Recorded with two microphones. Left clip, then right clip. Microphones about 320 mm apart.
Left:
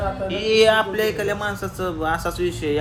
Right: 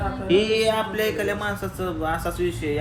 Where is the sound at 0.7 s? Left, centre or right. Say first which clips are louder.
Left 3 dB; centre.